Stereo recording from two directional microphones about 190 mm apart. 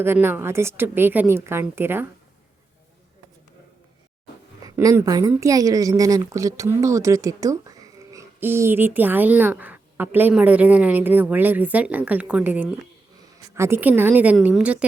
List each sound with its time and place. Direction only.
0.0 s a woman's voice: 10° right (ahead or behind)
4.6 s a woman's voice: 20° right (ahead or behind)